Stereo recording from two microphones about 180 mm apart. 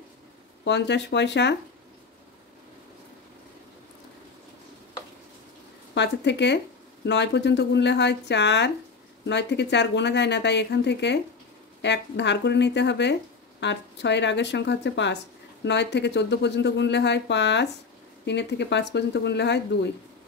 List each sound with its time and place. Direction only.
0.7 s speech: 75° left (ahead or behind)
5.9 s speech: 75° left (ahead or behind)